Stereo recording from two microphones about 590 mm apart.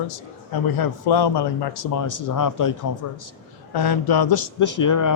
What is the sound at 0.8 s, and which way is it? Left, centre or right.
Speech, left.